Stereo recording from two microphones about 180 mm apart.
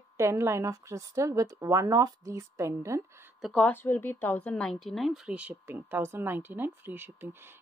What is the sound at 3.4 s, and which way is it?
A woman's voice, 5° left (ahead or behind).